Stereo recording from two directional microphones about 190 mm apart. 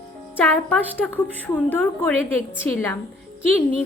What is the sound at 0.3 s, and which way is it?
Speech, 5° left (ahead or behind).